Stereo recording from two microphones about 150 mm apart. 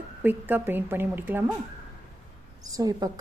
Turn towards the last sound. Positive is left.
turn(degrees=-25)  # may be behind; listen again after turning